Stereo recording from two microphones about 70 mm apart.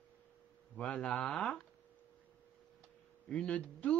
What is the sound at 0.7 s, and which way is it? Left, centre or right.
Speech, centre.